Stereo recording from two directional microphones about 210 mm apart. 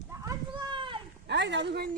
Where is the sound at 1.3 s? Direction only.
55° right (ahead or behind).